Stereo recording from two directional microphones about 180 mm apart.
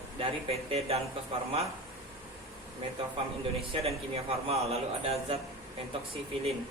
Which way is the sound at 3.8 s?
35° right (ahead or behind).